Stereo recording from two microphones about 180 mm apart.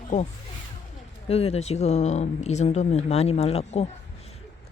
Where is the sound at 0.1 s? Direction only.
40° left (ahead or behind).